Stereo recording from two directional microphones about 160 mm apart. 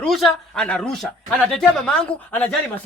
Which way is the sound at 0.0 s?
5° left (ahead or behind).